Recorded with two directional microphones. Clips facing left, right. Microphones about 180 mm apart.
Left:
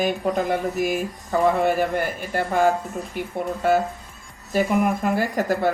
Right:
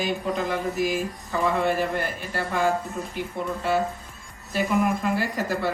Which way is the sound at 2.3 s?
50° left (ahead or behind).